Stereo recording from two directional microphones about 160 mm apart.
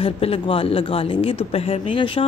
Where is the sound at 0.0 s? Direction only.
35° left (ahead or behind).